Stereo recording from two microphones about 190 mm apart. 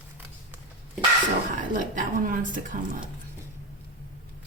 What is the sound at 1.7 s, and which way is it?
Speech, 45° right (ahead or behind).